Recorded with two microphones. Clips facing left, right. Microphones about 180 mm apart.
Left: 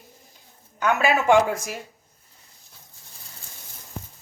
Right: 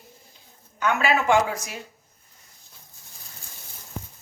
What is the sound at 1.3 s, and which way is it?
Speech, 50° left (ahead or behind).